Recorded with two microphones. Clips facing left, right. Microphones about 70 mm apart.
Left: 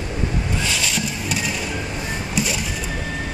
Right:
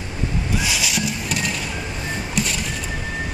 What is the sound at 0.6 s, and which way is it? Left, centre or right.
Horse, centre.